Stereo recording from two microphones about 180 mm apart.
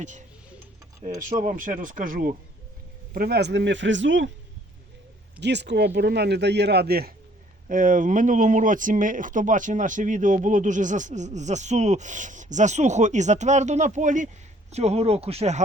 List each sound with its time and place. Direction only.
1.0 s speech: 40° right (ahead or behind); by 4.3 s 90° right
5.4 s speech: 70° right (ahead or behind)
7.7 s speech: 50° right (ahead or behind)